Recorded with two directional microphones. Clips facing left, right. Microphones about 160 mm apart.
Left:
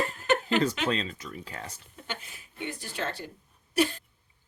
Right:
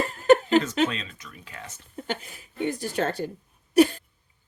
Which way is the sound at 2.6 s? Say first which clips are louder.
Right 9 dB; 40° right (ahead or behind).